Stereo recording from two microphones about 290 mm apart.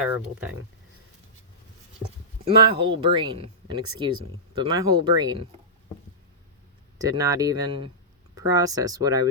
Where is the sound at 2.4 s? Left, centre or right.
Centre.